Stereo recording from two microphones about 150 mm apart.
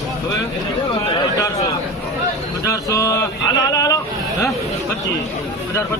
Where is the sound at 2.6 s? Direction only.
20° left (ahead or behind).